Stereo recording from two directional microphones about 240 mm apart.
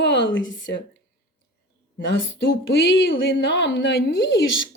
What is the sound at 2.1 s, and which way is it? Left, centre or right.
Speech, left.